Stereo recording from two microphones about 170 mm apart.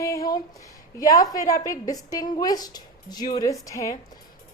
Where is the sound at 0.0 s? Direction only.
20° left (ahead or behind).